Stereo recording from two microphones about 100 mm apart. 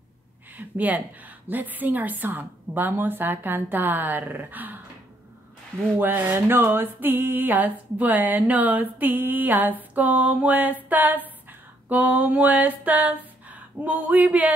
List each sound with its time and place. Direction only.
0.5 s a woman's voice: 15° right (ahead or behind)
5.9 s a woman's voice: 20° right (ahead or behind)
8.9 s a sound: 20° right (ahead or behind)